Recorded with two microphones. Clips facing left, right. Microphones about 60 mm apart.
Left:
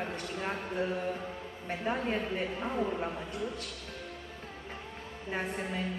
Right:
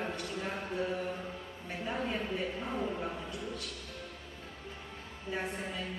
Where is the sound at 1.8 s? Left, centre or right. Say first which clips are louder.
Left 3 dB; left.